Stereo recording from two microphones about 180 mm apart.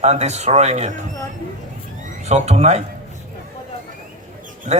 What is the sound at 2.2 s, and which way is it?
Speech, 35° right (ahead or behind).